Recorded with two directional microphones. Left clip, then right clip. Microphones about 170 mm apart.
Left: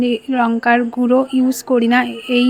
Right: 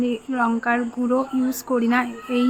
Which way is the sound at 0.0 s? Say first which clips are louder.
Left 6 dB; 30° left (ahead or behind).